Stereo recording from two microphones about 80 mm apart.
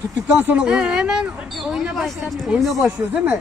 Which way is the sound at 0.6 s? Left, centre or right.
Centre.